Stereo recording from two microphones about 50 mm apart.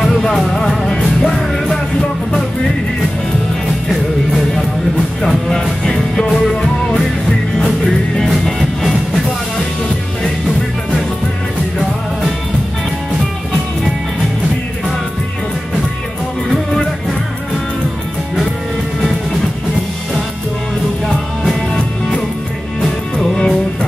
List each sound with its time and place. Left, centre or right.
0.0 s music: centre
5.2 s music: centre
23.1 s music: centre